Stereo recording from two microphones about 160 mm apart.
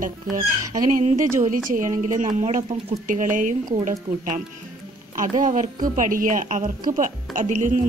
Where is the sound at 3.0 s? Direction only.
55° right (ahead or behind).